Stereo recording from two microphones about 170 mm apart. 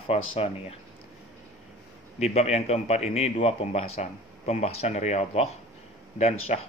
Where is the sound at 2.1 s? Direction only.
40° left (ahead or behind).